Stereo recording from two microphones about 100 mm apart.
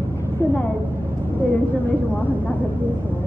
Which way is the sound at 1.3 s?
20° left (ahead or behind).